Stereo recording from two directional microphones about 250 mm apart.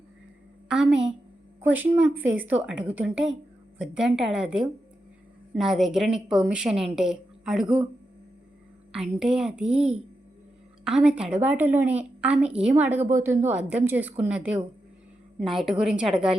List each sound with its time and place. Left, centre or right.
2.0 s a woman's voice: centre
8.9 s a woman's voice: centre